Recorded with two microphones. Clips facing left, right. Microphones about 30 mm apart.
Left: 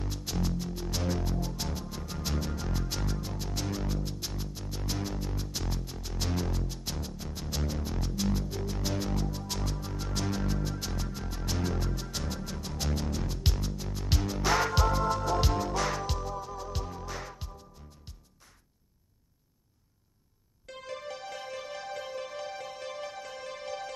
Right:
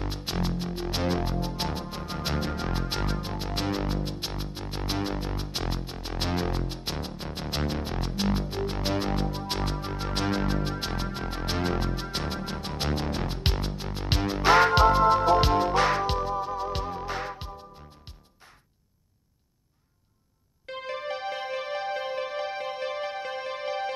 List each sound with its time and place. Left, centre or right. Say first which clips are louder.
0.0 s music: right 3 dB; right
20.6 s music: right 7 dB; right